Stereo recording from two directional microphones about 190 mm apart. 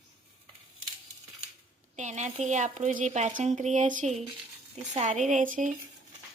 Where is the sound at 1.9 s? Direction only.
40° right (ahead or behind).